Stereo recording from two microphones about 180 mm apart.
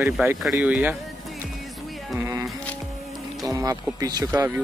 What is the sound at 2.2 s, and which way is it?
Music, 15° right (ahead or behind).